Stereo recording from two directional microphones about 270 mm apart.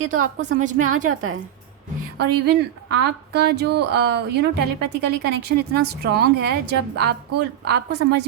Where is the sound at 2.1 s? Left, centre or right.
Right.